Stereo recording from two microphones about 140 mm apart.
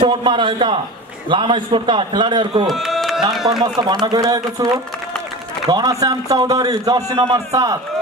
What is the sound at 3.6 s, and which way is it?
A man's voice, 30° right (ahead or behind).